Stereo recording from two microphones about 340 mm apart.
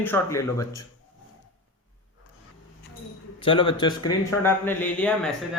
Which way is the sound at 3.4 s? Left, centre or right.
Centre.